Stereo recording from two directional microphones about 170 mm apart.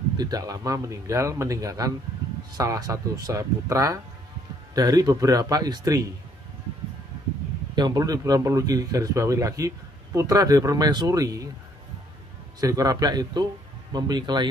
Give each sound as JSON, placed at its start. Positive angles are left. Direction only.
{"t": 0.2, "sound": "a man's voice", "side_deg": -20}
{"t": 7.7, "sound": "a man's voice", "side_deg": -25}
{"t": 12.5, "sound": "a man's voice", "side_deg": -20}